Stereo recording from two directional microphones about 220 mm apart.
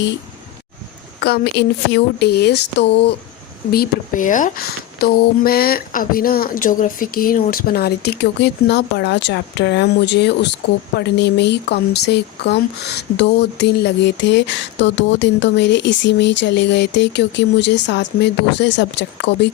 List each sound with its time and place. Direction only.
1.2 s speech: 45° left (ahead or behind)